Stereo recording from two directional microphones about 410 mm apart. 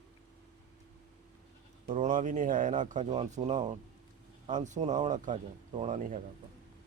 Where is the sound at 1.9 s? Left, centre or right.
Centre.